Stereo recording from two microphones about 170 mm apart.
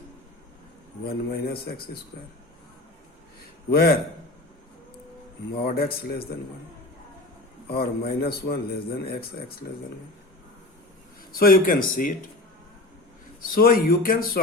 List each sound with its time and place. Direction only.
1.0 s a man's voice: 60° left (ahead or behind)
3.7 s a man's voice: 65° left (ahead or behind)
5.6 s a man's voice: 65° left (ahead or behind)
7.7 s a man's voice: 65° left (ahead or behind)
11.3 s a man's voice: 60° left (ahead or behind)
13.4 s a man's voice: 55° left (ahead or behind)